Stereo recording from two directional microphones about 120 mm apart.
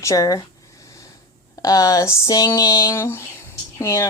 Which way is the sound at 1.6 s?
30° left (ahead or behind).